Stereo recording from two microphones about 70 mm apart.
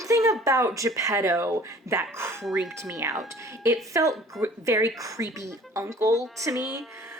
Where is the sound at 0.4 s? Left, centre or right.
Right.